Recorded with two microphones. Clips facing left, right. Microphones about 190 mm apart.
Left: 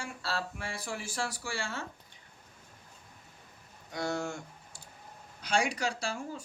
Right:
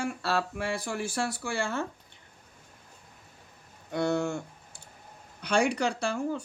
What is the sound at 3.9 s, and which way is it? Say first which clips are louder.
Speech: right 6 dB; 60° right (ahead or behind).